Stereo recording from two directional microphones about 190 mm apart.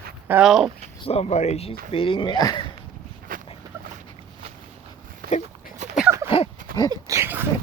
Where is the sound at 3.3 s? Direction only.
45° right (ahead or behind).